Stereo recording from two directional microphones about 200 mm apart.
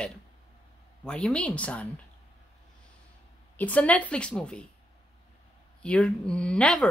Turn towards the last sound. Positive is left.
turn(degrees=5)  # may be behind; listen again after turning